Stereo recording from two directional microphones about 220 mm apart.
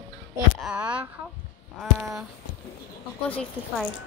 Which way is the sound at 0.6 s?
5° right (ahead or behind).